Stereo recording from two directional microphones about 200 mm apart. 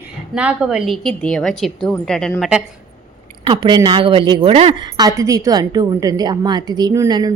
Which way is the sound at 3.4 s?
25° right (ahead or behind).